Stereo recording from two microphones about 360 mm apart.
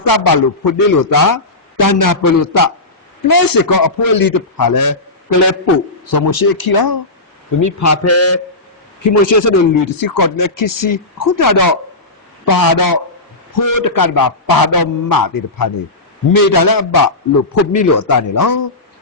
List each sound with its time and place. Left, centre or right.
0.0 s a man's voice: left
6.1 s a man's voice: left
7.6 s a man's voice: left
9.0 s a man's voice: left